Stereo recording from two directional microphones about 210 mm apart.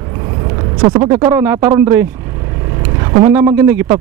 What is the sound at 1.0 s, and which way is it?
Speech, 20° right (ahead or behind).